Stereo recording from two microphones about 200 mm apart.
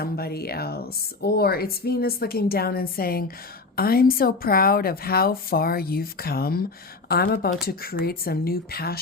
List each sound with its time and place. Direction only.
0.0 s speech: 50° left (ahead or behind)